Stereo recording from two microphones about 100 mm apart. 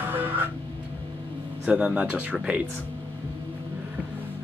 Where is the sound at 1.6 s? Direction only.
10° right (ahead or behind).